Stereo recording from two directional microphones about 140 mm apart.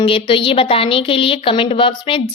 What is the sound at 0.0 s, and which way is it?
A woman's voice, 40° left (ahead or behind).